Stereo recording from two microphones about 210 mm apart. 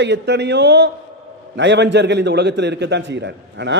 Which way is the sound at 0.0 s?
55° right (ahead or behind).